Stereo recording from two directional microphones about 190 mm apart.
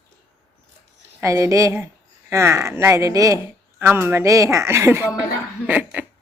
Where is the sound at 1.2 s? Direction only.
15° right (ahead or behind).